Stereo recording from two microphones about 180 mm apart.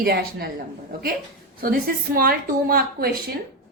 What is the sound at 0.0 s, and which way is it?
Speech, 60° right (ahead or behind).